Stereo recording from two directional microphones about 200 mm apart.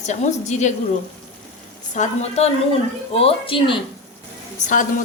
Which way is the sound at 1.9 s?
40° left (ahead or behind).